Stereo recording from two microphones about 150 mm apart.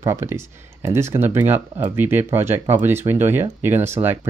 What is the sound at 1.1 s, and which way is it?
Speech, 15° right (ahead or behind).